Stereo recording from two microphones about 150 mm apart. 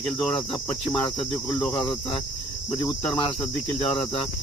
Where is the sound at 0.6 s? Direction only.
10° left (ahead or behind).